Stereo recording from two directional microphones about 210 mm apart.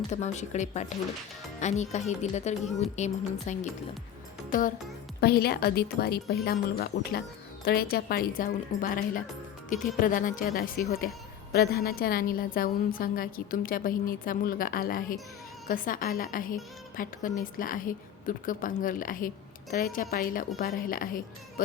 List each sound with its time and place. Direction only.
0.1 s a woman's voice: 35° left (ahead or behind)
5.2 s a woman's voice: 50° left (ahead or behind)